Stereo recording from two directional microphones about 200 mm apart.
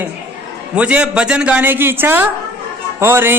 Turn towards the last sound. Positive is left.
turn(degrees=-10)  # may be behind; listen again after turning